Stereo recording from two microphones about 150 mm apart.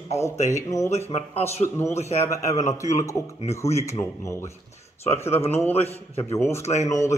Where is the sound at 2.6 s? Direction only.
50° left (ahead or behind).